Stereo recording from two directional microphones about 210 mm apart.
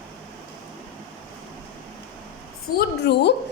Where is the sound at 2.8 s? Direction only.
55° left (ahead or behind).